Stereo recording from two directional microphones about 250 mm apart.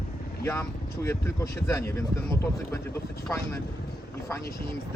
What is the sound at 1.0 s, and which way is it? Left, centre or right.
Speech, centre.